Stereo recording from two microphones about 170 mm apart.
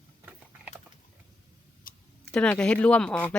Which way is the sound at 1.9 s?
55° left (ahead or behind).